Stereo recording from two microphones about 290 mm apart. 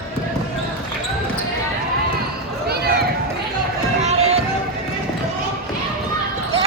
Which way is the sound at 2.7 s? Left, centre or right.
Right.